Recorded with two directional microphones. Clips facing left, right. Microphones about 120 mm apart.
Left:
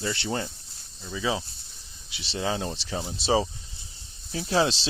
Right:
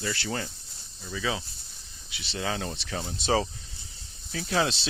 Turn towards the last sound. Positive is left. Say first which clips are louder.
# left 3 dB
turn(degrees=30)  # may be behind; listen again after turning